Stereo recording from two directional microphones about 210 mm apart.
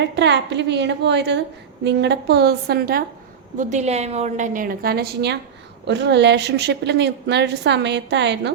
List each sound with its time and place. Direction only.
0.0 s a woman's voice: 55° right (ahead or behind)
3.6 s a woman's voice: 35° right (ahead or behind); by 8.5 s 55° right (ahead or behind)